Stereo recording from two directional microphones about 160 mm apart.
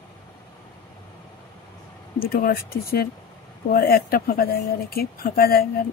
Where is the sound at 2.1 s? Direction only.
70° left (ahead or behind).